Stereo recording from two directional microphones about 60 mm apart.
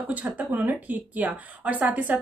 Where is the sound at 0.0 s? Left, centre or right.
Right.